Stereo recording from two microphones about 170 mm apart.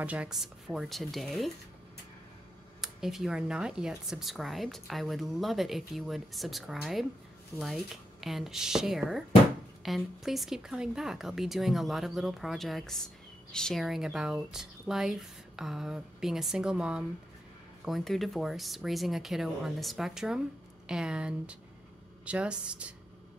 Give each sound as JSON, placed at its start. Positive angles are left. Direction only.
{"t": 0.0, "sound": "speech", "side_deg": -5}
{"t": 2.8, "sound": "speech", "side_deg": 0}